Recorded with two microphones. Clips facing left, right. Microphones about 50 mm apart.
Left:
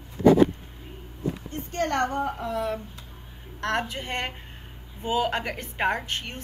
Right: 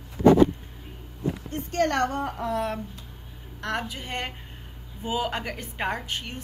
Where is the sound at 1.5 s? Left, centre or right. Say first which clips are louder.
Right 3 dB; right.